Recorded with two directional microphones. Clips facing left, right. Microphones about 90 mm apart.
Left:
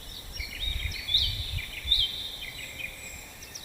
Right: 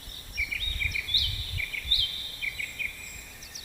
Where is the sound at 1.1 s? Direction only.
40° left (ahead or behind).